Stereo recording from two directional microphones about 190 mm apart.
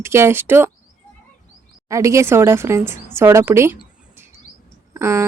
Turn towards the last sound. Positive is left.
turn(degrees=-15)  # may be behind; listen again after turning